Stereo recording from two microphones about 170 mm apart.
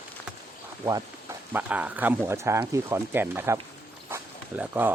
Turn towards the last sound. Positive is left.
turn(degrees=-10)  # may be behind; listen again after turning